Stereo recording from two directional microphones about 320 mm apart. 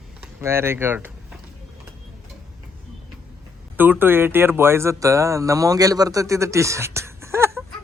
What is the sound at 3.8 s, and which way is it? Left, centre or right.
Speech, centre.